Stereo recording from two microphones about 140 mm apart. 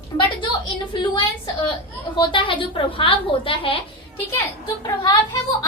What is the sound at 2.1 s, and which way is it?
A woman's voice, 35° left (ahead or behind).